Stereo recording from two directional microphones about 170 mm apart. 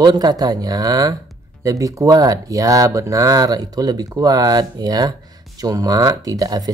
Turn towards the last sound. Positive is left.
turn(degrees=-20)  # may be behind; listen again after turning